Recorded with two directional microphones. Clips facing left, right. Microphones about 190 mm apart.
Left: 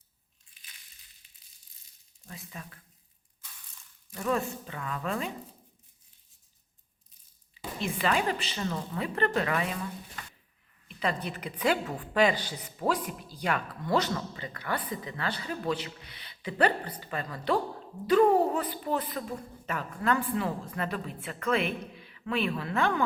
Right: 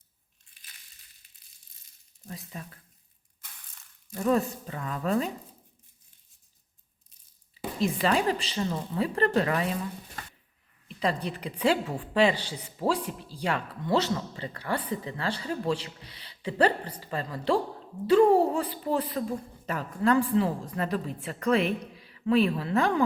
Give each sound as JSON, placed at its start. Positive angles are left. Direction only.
{"t": 2.2, "sound": "speech", "side_deg": -35}
{"t": 4.1, "sound": "speech", "side_deg": -35}
{"t": 7.8, "sound": "speech", "side_deg": -35}
{"t": 10.8, "sound": "a woman's voice", "side_deg": -35}